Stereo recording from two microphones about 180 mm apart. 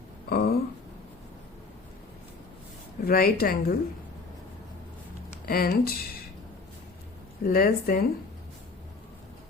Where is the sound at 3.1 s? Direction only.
55° left (ahead or behind).